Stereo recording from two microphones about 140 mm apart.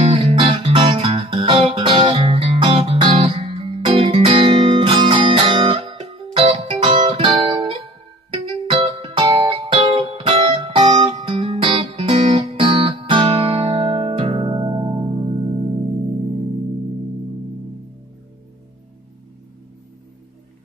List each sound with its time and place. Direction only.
0.1 s music: 40° right (ahead or behind)